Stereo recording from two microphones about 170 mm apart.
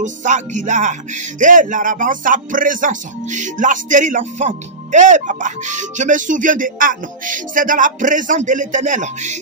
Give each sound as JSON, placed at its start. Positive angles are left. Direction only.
{"t": 0.0, "sound": "speech", "side_deg": -45}